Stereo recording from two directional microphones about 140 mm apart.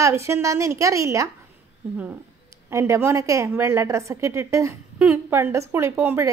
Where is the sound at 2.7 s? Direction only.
20° right (ahead or behind).